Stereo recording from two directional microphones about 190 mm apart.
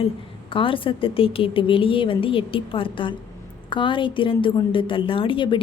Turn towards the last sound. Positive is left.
turn(degrees=25)  # may be behind; listen again after turning